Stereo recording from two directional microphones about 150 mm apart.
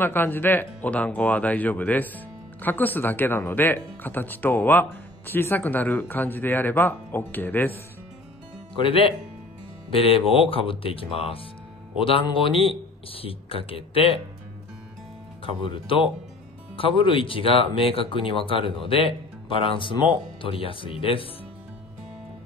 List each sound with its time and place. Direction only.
0.0 s speech: 15° left (ahead or behind)
8.7 s speech: 35° left (ahead or behind)
15.6 s speech: 35° left (ahead or behind)